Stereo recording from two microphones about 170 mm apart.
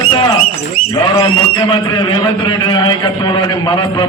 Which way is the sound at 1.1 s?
25° left (ahead or behind).